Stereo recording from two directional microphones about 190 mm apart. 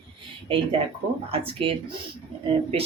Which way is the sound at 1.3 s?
30° right (ahead or behind).